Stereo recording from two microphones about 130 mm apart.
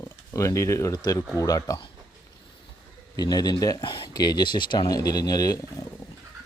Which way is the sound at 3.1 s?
30° left (ahead or behind).